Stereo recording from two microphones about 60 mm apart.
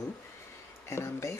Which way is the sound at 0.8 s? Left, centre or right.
Left.